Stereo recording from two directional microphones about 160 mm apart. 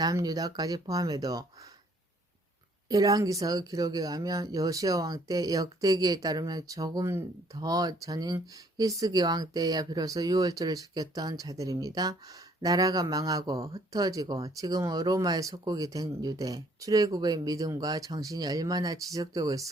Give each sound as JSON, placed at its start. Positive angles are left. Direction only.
{"t": 0.0, "sound": "speech", "side_deg": -20}
{"t": 2.9, "sound": "speech", "side_deg": -20}